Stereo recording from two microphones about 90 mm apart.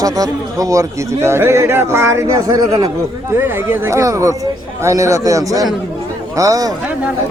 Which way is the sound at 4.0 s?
35° right (ahead or behind).